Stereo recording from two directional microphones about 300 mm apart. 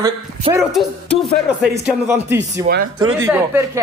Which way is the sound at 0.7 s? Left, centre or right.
Centre.